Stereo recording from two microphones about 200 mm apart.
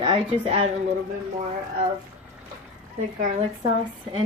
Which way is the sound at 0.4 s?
30° right (ahead or behind).